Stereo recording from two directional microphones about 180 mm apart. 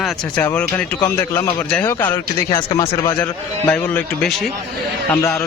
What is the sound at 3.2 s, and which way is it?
Speech, 10° left (ahead or behind).